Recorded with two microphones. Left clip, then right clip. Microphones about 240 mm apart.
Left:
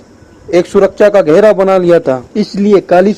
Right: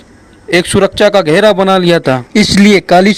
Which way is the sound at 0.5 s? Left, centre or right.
Right.